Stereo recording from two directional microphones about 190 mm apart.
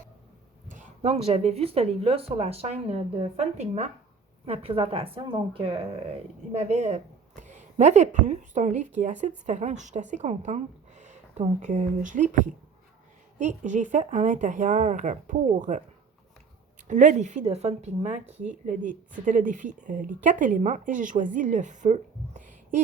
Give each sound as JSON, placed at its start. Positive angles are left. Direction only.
{"t": 0.7, "sound": "a woman's voice", "side_deg": -35}
{"t": 16.9, "sound": "speech", "side_deg": -40}